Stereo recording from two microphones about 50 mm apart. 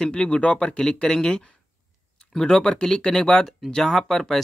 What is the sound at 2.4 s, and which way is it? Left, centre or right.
Speech, centre.